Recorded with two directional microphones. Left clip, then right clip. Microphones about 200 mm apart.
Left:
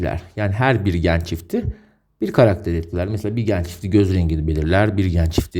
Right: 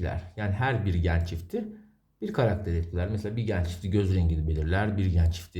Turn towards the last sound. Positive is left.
turn(degrees=45)  # may be behind; listen again after turning